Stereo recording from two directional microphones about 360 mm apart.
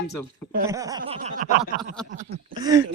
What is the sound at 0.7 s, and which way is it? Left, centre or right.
Speech, centre.